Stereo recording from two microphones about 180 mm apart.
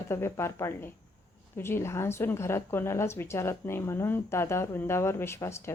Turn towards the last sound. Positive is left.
turn(degrees=15)  # may be behind; listen again after turning